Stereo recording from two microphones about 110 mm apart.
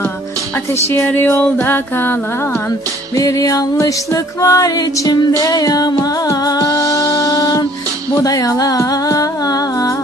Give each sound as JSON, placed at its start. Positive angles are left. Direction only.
{"t": 1.0, "sound": "music", "side_deg": 20}
{"t": 3.2, "sound": "music", "side_deg": 30}